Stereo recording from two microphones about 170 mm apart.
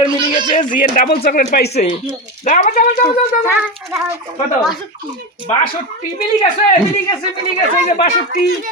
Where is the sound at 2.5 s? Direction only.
50° left (ahead or behind).